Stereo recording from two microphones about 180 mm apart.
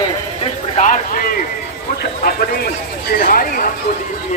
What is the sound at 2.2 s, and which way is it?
Speech, 60° left (ahead or behind).